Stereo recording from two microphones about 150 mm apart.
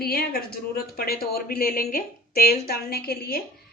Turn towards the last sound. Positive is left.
turn(degrees=90)